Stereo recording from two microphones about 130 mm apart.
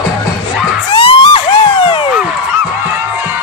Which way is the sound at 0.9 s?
40° left (ahead or behind).